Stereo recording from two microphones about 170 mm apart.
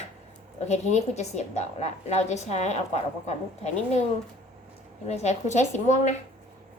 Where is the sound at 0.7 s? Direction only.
40° left (ahead or behind).